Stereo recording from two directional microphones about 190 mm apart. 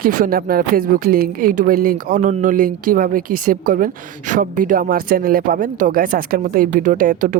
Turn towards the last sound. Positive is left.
turn(degrees=-45)  # may be behind; listen again after turning